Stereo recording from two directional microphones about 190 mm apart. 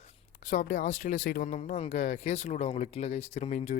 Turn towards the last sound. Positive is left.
turn(degrees=35)  # may be behind; listen again after turning